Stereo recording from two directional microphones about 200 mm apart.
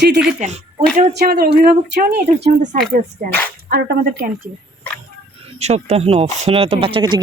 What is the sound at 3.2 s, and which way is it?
Speech, 45° right (ahead or behind).